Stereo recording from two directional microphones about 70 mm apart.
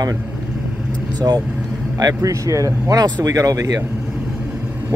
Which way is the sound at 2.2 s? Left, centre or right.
Right.